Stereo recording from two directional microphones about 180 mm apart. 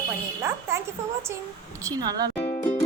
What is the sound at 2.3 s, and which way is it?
Music, 30° left (ahead or behind).